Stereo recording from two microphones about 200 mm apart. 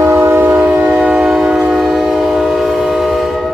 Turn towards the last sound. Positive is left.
turn(degrees=0)  # may be behind; listen again after turning